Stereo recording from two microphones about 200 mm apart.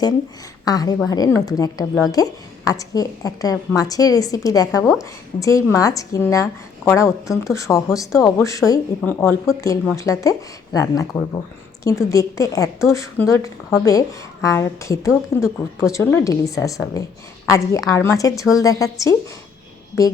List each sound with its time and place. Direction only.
0.6 s a woman's voice: 20° left (ahead or behind)